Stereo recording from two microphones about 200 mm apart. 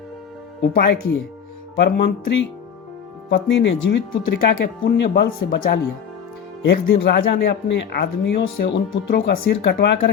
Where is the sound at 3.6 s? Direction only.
60° left (ahead or behind).